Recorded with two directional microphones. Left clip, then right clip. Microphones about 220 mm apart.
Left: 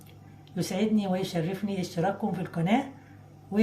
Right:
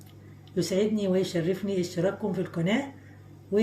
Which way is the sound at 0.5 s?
50° left (ahead or behind).